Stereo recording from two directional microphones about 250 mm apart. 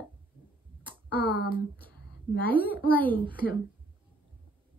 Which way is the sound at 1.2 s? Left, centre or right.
Left.